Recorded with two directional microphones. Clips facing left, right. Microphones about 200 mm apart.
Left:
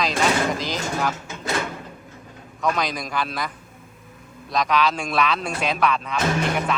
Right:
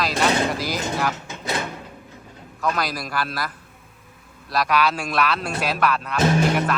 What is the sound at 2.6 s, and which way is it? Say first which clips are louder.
Speech: left 1 dB; 5° right (ahead or behind).